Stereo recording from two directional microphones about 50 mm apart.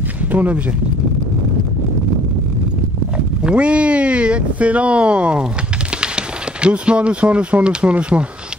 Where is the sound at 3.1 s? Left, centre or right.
Centre.